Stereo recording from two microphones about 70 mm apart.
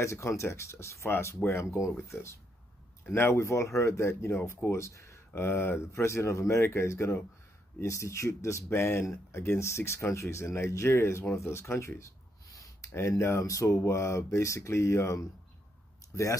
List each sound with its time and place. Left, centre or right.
0.0 s speech: left
8.6 s speech: left
12.8 s a sound: left
13.2 s speech: left